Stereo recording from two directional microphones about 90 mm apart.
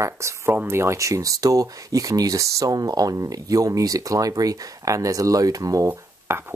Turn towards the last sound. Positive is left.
turn(degrees=-30)  # may be behind; listen again after turning